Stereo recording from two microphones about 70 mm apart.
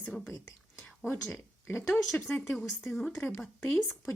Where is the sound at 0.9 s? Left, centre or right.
Left.